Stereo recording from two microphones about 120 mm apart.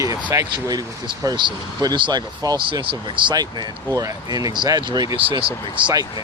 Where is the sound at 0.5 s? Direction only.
35° right (ahead or behind).